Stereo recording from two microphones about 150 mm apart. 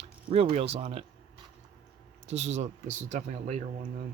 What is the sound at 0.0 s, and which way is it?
Speech, 40° right (ahead or behind).